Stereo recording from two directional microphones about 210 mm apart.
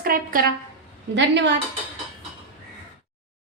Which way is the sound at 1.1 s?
55° right (ahead or behind).